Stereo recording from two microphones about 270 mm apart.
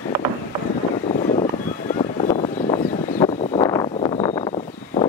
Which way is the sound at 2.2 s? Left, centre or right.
Left.